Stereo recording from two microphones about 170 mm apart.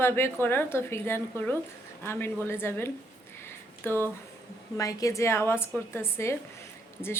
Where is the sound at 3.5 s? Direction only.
15° left (ahead or behind).